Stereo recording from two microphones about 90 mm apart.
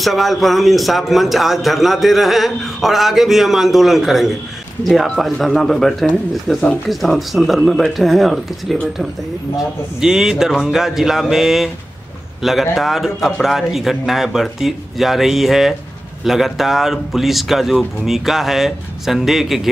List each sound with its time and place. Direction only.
0.0 s speech: centre (ahead or behind)
9.9 s speech: 5° right (ahead or behind)